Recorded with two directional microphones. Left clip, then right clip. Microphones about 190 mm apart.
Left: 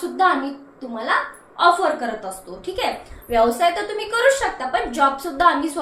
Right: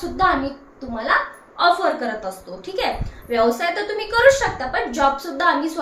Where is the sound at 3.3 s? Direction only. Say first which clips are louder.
Left 2 dB; 5° right (ahead or behind).